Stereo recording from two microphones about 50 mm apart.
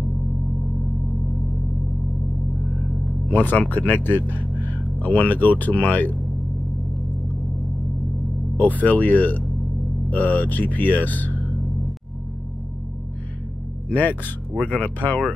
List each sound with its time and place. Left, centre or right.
3.3 s speech: left
8.5 s speech: left
13.9 s speech: left